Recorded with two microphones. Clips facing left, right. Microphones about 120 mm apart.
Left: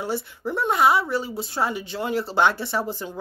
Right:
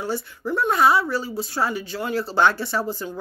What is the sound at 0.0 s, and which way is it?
A woman's voice, 25° left (ahead or behind).